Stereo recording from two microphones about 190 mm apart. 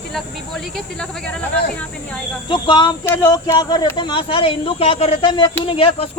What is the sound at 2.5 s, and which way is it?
Speech, 25° left (ahead or behind).